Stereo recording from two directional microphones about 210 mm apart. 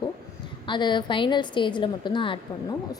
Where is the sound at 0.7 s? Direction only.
20° left (ahead or behind).